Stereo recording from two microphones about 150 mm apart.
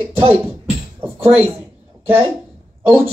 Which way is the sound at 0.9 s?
15° right (ahead or behind).